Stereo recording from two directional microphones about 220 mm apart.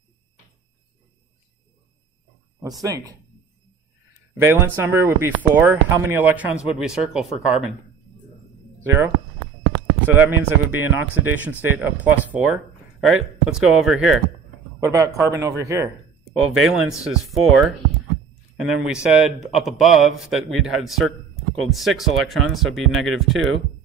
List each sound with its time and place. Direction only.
2.8 s speech: 15° right (ahead or behind)
4.4 s speech: 10° right (ahead or behind)
8.8 s speech: 10° right (ahead or behind)
14.8 s speech: 15° right (ahead or behind)
16.5 s speech: centre (ahead or behind)
18.7 s speech: 5° right (ahead or behind)